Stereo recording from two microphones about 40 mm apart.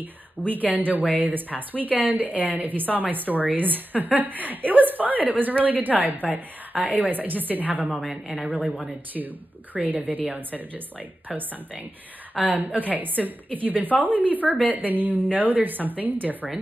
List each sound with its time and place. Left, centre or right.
0.0 s a woman's voice: right
7.9 s a woman's voice: centre
8.5 s a woman's voice: right